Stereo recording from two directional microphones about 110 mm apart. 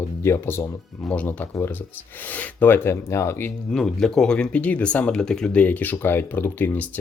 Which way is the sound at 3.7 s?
5° left (ahead or behind).